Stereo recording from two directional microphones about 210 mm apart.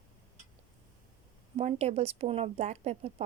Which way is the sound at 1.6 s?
30° right (ahead or behind).